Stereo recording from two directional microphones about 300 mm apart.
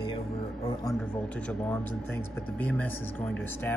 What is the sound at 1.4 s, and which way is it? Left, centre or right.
Speech, centre.